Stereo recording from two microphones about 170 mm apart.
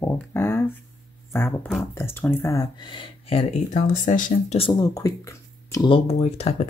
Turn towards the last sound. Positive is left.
turn(degrees=35)  # may be behind; listen again after turning